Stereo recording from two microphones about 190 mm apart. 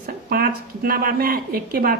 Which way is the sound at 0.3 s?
50° right (ahead or behind).